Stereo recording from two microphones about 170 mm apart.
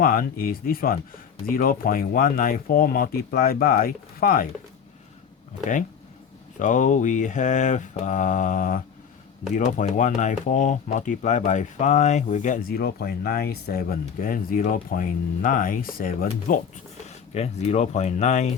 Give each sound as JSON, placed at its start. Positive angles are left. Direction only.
{"t": 0.0, "sound": "speech", "side_deg": 55}
{"t": 6.6, "sound": "speech", "side_deg": 45}
{"t": 17.1, "sound": "speech", "side_deg": 40}